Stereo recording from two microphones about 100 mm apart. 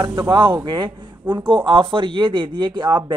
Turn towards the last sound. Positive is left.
turn(degrees=-50)  # may be behind; listen again after turning